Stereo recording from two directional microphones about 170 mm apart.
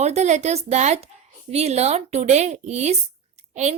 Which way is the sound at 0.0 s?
40° right (ahead or behind).